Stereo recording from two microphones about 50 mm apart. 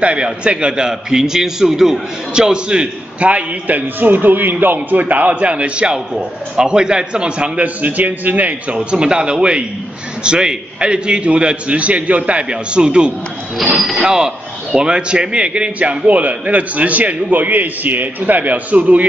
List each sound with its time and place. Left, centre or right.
0.0 s a man's voice: right
3.3 s a man's voice: right
8.7 s a man's voice: centre
13.7 s speech: centre
14.0 s a man's voice: centre; by 19.0 s right